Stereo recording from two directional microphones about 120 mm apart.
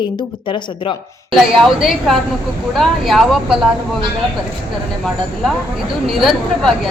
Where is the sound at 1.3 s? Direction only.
Centre (ahead or behind).